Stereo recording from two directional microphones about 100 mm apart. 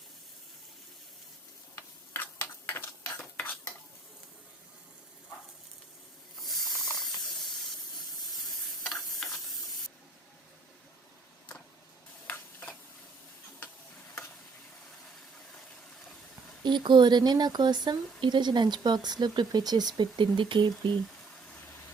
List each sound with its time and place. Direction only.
1.7 s a sound: 20° left (ahead or behind)
3.2 s stir: 15° left (ahead or behind)
6.4 s snake: centre (ahead or behind)
8.9 s stir: 5° left (ahead or behind)
12.3 s stir: 20° left (ahead or behind)
16.6 s speech: 50° right (ahead or behind)